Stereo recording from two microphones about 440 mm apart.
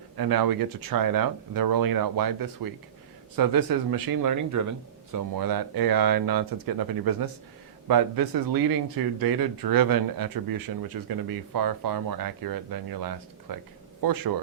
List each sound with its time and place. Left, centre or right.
0.2 s speech: right